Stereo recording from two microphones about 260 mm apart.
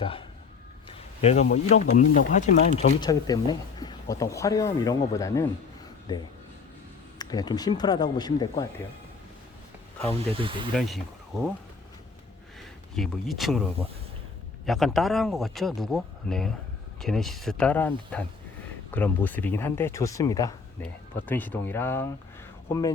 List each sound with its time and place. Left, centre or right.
0.0 s speech: centre
3.0 s speech: centre
7.2 s speech: centre
10.3 s speech: centre
10.8 s speech: centre
12.9 s speech: centre
14.7 s speech: centre